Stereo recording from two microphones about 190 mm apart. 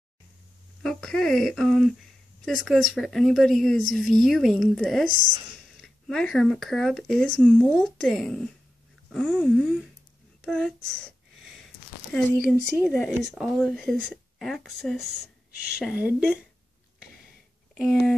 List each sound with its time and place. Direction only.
0.8 s speech: centre (ahead or behind)
17.7 s speech: centre (ahead or behind)